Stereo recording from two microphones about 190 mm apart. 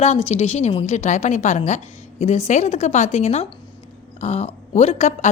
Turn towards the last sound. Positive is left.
turn(degrees=35)  # may be behind; listen again after turning